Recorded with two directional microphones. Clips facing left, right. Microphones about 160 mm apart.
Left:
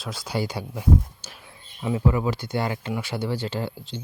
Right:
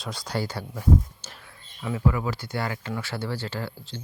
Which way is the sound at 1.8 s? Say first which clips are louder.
Left 3 dB; 20° left (ahead or behind).